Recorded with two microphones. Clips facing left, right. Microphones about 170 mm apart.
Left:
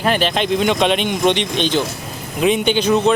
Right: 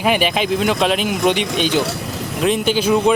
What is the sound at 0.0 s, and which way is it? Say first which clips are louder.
Speech: even; 10° right (ahead or behind).